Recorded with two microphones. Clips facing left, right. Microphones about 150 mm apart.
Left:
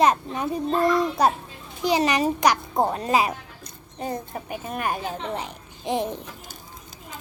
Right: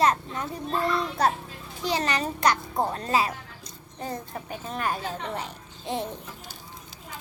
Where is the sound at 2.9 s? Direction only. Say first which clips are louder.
Left 3 dB; 15° left (ahead or behind).